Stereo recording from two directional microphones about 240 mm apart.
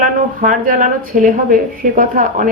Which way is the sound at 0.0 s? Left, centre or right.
Right.